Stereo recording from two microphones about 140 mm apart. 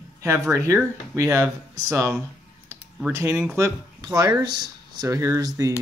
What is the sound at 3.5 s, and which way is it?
Speech, 25° right (ahead or behind).